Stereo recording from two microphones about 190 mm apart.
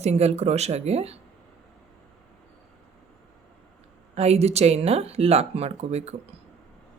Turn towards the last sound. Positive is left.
turn(degrees=-35)  # may be behind; listen again after turning